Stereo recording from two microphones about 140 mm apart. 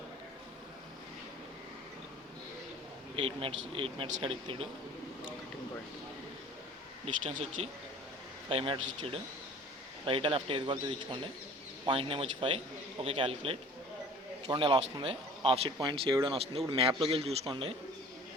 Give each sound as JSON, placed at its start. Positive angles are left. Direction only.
{"t": 3.2, "sound": "a man's voice", "side_deg": -40}
{"t": 7.0, "sound": "a man's voice", "side_deg": -50}